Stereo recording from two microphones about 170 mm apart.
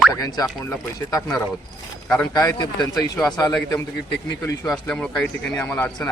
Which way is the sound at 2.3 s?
25° left (ahead or behind).